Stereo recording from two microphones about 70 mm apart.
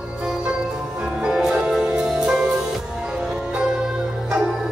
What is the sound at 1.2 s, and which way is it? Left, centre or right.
Music, centre.